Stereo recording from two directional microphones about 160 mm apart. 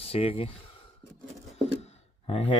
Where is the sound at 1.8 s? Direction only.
40° left (ahead or behind).